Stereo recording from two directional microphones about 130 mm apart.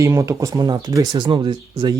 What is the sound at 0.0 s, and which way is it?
Speech, 20° right (ahead or behind).